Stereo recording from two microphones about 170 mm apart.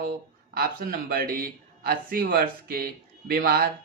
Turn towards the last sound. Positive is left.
turn(degrees=-60)  # may be behind; listen again after turning